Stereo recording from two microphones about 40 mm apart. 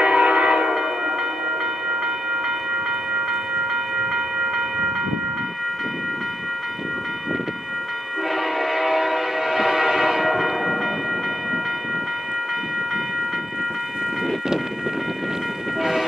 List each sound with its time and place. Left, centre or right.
0.0 s train: right
8.5 s train: centre
15.8 s train: centre